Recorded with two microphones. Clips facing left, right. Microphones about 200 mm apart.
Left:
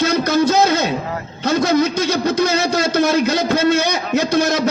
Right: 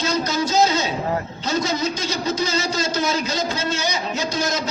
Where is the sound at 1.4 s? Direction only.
60° left (ahead or behind).